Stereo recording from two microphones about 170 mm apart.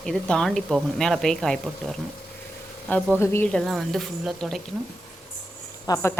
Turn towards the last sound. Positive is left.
turn(degrees=20)  # may be behind; listen again after turning